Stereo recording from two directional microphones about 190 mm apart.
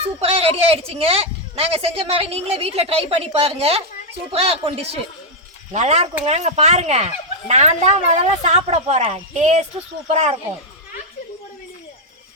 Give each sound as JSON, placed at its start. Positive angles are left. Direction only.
{"t": 0.2, "sound": "speech", "side_deg": -30}